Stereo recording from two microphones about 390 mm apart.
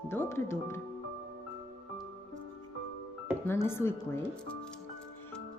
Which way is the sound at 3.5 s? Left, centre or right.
Centre.